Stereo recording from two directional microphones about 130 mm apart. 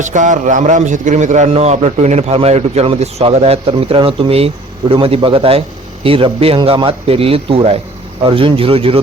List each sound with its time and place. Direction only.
0.0 s a man's voice: 70° right (ahead or behind); by 9.0 s 45° right (ahead or behind)